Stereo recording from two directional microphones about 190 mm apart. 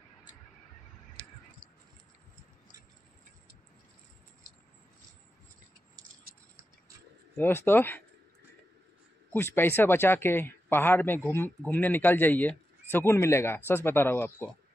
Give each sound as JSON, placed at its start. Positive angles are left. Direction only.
{"t": 7.3, "sound": "speech", "side_deg": 10}
{"t": 9.3, "sound": "speech", "side_deg": 10}